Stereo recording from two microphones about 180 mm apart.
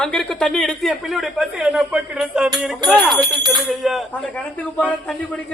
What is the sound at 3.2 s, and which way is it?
Speech, 20° right (ahead or behind).